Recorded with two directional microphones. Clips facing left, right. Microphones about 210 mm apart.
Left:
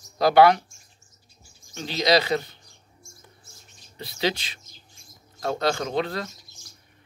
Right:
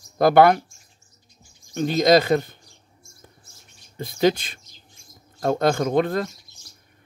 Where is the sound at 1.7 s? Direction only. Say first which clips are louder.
Right 5 dB; 50° right (ahead or behind).